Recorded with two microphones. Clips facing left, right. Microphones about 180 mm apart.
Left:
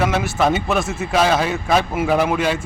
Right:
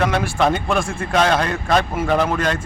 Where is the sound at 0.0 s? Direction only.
5° left (ahead or behind).